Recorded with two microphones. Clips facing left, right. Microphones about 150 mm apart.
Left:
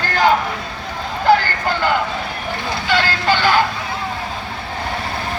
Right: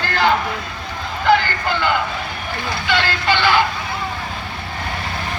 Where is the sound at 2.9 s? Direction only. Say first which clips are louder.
Left 2 dB; 40° left (ahead or behind).